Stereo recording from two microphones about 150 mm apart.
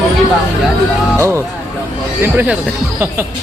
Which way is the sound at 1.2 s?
20° right (ahead or behind).